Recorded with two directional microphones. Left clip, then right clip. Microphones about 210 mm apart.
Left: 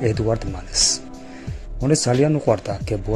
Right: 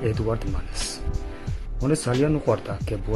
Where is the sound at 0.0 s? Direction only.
15° left (ahead or behind).